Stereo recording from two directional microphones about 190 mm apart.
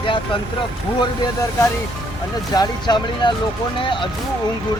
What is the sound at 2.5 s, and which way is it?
Speech, 20° left (ahead or behind).